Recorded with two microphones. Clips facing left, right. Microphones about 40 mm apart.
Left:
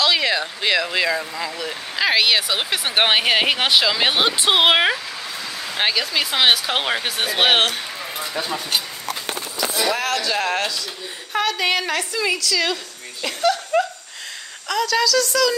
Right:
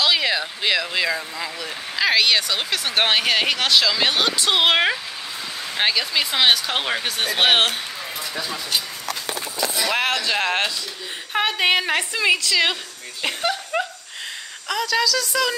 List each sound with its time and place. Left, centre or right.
0.0 s speech: centre
8.4 s speech: left
9.9 s a woman's voice: right
13.5 s a sound: centre
14.7 s a woman's voice: centre